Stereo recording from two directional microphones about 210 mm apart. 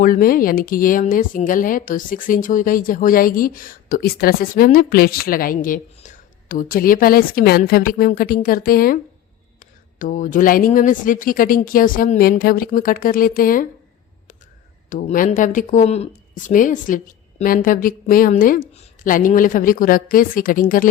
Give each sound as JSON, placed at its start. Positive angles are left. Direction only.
{"t": 0.0, "sound": "speech", "side_deg": 40}
{"t": 14.8, "sound": "speech", "side_deg": 40}